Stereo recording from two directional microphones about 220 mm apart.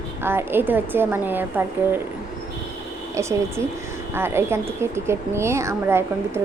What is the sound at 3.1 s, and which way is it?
Speech, 15° right (ahead or behind).